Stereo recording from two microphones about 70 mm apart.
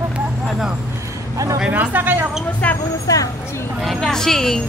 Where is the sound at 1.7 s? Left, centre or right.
Right.